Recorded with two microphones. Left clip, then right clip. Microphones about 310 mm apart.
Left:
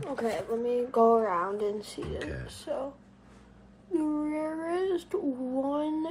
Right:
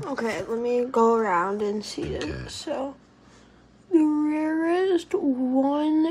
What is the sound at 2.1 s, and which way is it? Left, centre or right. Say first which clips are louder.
Speech: right 5 dB; centre.